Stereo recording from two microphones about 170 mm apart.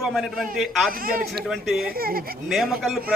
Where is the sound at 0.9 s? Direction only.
60° right (ahead or behind).